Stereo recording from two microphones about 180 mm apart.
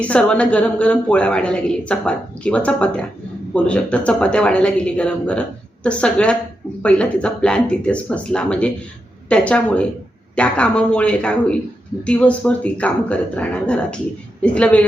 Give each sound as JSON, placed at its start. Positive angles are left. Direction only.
{"t": 0.0, "sound": "a woman's voice", "side_deg": 5}